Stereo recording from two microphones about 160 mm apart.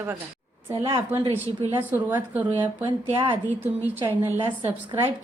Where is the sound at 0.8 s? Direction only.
35° right (ahead or behind).